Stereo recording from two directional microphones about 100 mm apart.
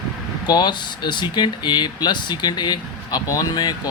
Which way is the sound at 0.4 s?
45° left (ahead or behind).